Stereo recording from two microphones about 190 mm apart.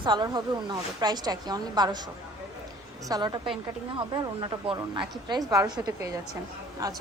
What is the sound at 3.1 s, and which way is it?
A woman's voice, 25° right (ahead or behind).